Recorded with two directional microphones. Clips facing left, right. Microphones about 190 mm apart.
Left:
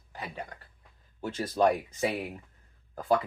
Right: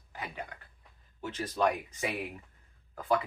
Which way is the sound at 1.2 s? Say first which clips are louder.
Left 4 dB; 35° left (ahead or behind).